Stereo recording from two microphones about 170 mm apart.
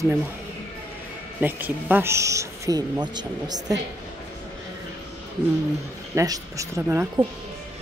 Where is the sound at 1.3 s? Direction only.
10° right (ahead or behind).